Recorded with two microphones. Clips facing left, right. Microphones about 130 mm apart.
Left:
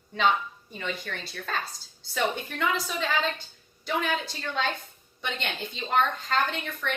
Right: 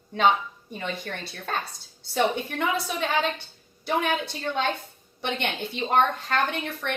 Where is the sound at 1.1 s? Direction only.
45° right (ahead or behind).